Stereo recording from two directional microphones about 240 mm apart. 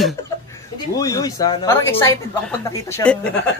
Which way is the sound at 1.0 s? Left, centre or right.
Centre.